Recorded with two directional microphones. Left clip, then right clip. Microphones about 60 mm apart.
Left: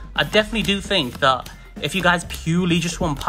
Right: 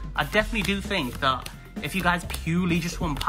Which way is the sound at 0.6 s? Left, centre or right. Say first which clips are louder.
Left 7 dB; left.